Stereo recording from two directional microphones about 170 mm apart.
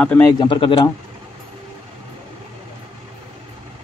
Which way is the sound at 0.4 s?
30° left (ahead or behind).